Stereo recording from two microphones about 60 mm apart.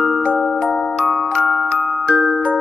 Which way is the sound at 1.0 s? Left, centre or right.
Centre.